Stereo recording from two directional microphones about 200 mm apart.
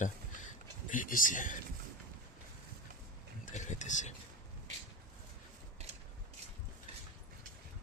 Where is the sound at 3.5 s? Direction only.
35° left (ahead or behind).